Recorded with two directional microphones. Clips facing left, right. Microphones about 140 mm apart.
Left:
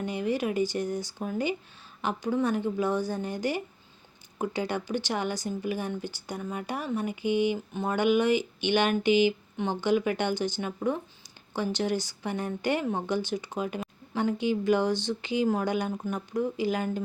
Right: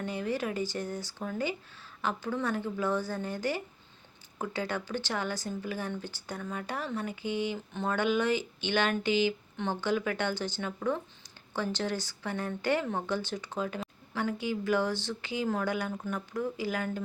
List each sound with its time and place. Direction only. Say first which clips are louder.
0.0 s speech: left 4 dB; 15° left (ahead or behind)